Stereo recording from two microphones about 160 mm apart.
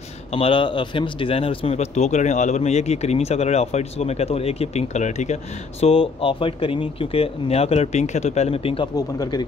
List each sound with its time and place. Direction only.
0.3 s speech: 35° left (ahead or behind)
8.9 s speech: 25° left (ahead or behind)